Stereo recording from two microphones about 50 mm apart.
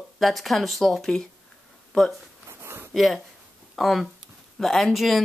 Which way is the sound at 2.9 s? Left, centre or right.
Centre.